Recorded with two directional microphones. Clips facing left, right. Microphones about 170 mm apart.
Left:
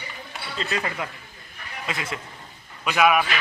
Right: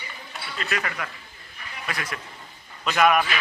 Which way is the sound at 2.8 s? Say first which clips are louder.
Even; 5° left (ahead or behind).